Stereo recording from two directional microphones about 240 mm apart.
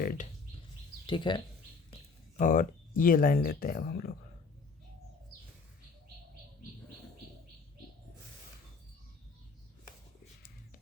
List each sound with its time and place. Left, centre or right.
0.0 s speech: left
1.0 s speech: centre
1.9 s speech: left